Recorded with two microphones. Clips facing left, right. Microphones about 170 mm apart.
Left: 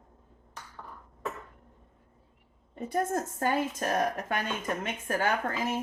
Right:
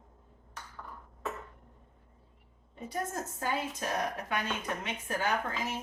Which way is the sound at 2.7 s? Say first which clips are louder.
Left 7 dB; 50° left (ahead or behind).